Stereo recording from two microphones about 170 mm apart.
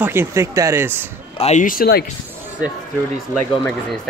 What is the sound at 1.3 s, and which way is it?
Speech, 40° left (ahead or behind).